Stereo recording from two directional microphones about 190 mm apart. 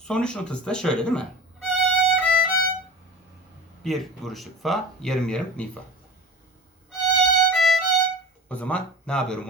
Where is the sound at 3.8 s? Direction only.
Centre (ahead or behind).